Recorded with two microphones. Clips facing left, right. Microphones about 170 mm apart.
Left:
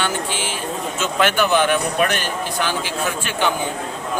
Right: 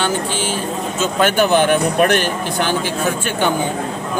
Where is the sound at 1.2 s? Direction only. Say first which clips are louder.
Right 3 dB; 45° right (ahead or behind).